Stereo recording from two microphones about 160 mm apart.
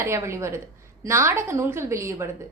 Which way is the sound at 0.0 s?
15° right (ahead or behind).